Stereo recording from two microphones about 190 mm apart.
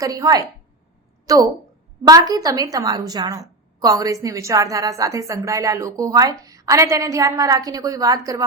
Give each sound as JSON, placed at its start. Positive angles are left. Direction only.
{"t": 0.0, "sound": "a woman's voice", "side_deg": -20}